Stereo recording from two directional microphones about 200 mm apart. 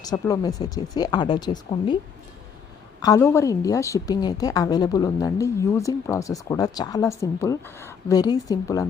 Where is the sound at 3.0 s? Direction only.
15° left (ahead or behind).